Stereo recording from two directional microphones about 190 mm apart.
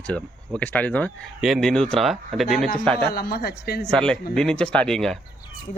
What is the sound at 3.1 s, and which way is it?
Speech, 55° left (ahead or behind).